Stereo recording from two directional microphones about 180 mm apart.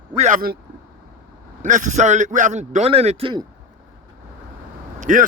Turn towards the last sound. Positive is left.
turn(degrees=-45)  # may be behind; listen again after turning